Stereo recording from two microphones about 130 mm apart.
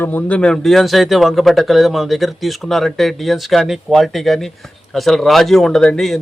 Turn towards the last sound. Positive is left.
turn(degrees=5)  # may be behind; listen again after turning